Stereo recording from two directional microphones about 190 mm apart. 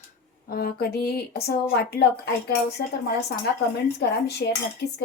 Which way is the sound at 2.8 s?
55° left (ahead or behind).